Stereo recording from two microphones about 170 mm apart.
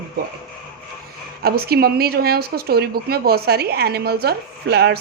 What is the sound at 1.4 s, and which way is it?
A woman's voice, 65° right (ahead or behind).